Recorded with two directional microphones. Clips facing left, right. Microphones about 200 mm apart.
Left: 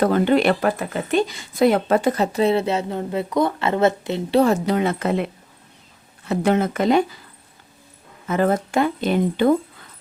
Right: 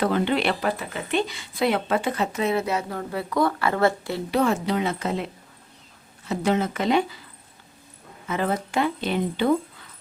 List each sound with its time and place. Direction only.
0.0 s speech: 45° left (ahead or behind); by 4.4 s 20° left (ahead or behind)
4.4 s speech: 45° left (ahead or behind)
8.3 s speech: 45° left (ahead or behind)